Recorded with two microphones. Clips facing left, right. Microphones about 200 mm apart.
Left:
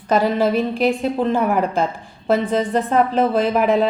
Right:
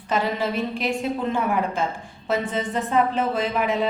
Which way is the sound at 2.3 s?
35° left (ahead or behind).